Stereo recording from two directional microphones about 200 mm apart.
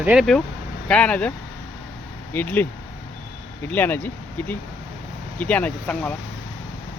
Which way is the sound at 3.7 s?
10° left (ahead or behind).